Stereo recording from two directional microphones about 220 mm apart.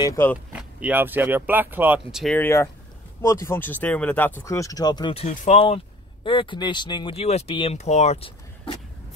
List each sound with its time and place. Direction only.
0.0 s speech: 10° left (ahead or behind)
0.5 s speech: 5° right (ahead or behind)
2.2 s speech: 10° left (ahead or behind); by 8.3 s 30° left (ahead or behind)